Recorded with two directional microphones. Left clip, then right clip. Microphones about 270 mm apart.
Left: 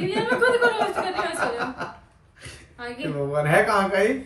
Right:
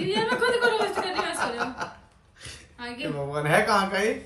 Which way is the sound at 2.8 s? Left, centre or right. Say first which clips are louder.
Left 3 dB; centre.